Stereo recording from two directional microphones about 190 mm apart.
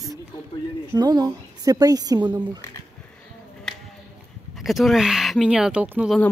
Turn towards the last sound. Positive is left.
turn(degrees=-5)  # may be behind; listen again after turning